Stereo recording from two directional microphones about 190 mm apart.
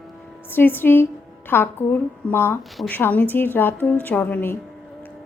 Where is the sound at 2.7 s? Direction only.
Centre (ahead or behind).